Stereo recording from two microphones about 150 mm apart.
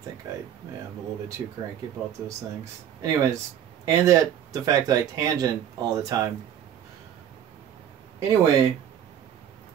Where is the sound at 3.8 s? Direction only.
20° right (ahead or behind).